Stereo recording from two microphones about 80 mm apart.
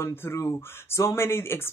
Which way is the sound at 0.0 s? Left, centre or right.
Left.